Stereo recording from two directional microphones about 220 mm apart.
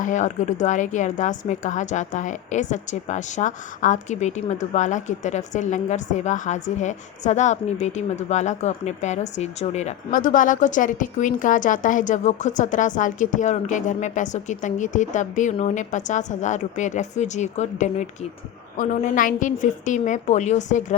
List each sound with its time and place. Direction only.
0.0 s a woman's voice: 35° left (ahead or behind)